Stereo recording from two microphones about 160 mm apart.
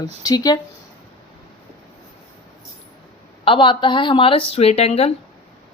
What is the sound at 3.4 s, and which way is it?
A woman's voice, 30° left (ahead or behind).